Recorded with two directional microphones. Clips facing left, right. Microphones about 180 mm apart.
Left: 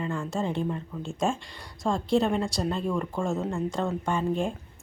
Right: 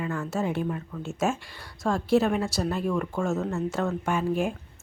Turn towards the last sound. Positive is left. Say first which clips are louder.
# right 1 dB
turn(degrees=-5)  # may be behind; listen again after turning